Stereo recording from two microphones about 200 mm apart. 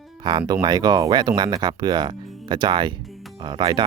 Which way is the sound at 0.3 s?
20° right (ahead or behind).